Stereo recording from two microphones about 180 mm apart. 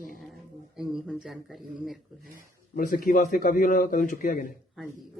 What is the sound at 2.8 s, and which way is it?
A man's voice, 50° left (ahead or behind).